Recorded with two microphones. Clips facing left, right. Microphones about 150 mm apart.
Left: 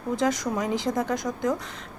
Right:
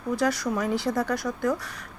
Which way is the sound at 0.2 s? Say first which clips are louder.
Left 1 dB; 20° left (ahead or behind).